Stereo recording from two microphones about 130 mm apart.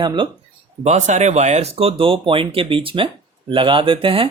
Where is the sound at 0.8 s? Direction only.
65° right (ahead or behind).